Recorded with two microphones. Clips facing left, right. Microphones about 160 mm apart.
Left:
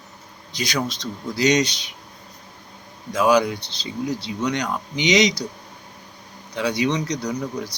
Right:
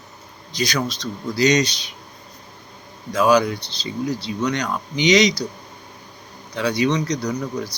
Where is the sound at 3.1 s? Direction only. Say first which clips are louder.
Right 1 dB; 20° left (ahead or behind).